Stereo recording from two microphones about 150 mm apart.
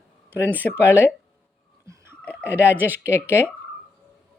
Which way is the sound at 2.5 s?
15° right (ahead or behind).